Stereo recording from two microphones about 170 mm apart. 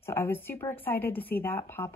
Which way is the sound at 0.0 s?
15° left (ahead or behind).